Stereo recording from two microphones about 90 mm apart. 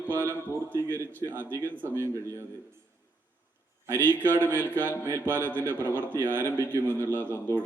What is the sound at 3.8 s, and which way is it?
A man's voice, 25° right (ahead or behind).